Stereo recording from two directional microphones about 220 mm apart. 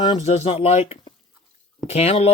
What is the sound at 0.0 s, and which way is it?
Speech, 25° left (ahead or behind).